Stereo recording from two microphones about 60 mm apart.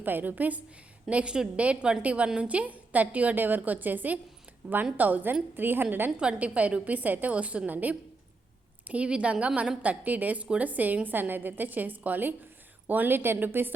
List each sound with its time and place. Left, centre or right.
0.0 s a woman's voice: right
1.1 s a woman's voice: centre; by 6.1 s right
6.1 s a woman's voice: centre; by 13.7 s right